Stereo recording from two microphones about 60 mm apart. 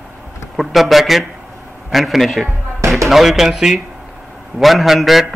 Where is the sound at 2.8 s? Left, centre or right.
Right.